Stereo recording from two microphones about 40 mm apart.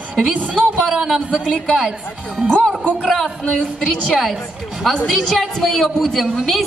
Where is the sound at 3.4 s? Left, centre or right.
Centre.